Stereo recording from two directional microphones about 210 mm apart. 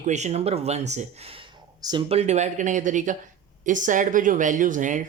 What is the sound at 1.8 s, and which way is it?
Speech, 20° right (ahead or behind).